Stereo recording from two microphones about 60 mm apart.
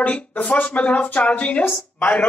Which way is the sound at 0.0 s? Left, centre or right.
Left.